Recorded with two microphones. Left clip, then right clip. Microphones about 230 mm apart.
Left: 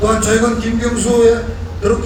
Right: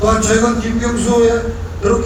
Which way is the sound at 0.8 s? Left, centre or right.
Left.